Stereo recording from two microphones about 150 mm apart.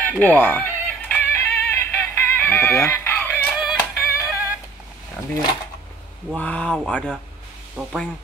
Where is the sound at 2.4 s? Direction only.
15° left (ahead or behind).